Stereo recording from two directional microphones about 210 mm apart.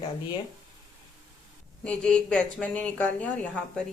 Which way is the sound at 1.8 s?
5° left (ahead or behind).